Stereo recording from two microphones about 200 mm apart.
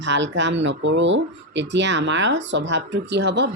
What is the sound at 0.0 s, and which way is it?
Speech, 65° right (ahead or behind).